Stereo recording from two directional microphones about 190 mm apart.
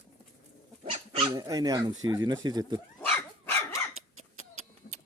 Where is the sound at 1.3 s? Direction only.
20° right (ahead or behind).